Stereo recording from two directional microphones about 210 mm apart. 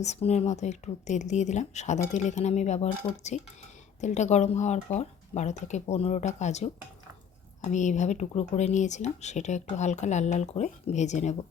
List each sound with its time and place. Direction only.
0.0 s speech: 30° left (ahead or behind)